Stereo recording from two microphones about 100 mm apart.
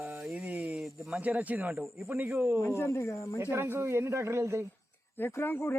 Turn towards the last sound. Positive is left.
turn(degrees=20)  # may be behind; listen again after turning